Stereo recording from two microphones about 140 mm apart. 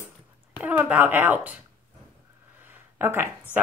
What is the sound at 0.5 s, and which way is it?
Speech, 10° right (ahead or behind).